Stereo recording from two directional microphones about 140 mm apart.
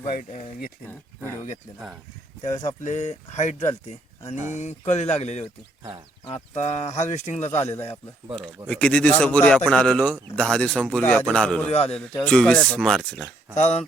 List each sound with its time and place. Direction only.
0.0 s speech: 60° left (ahead or behind)
2.6 s speech: 60° left (ahead or behind)
6.6 s speech: 50° left (ahead or behind)
8.6 s a man's voice: 10° left (ahead or behind)
11.7 s speech: 45° left (ahead or behind)
12.2 s a man's voice: 10° left (ahead or behind)
13.6 s speech: 55° left (ahead or behind)